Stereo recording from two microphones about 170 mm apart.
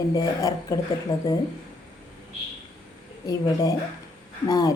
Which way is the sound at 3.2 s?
20° left (ahead or behind).